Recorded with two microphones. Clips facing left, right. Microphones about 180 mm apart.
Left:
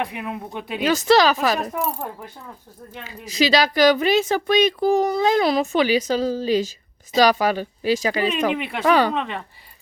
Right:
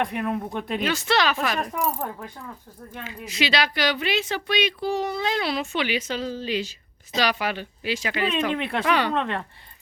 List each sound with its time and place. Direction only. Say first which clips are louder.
0.0 s speech: right 2 dB; 5° left (ahead or behind)
0.9 s speech: left 8 dB; 40° left (ahead or behind)
1.7 s speech: left 1 dB; 5° left (ahead or behind)
3.1 s speech: left 7 dB; 40° left (ahead or behind)
8.5 s speech: left 2 dB; centre (ahead or behind)
8.9 s speech: left 6 dB; 40° left (ahead or behind)
9.1 s speech: right 1 dB; centre (ahead or behind)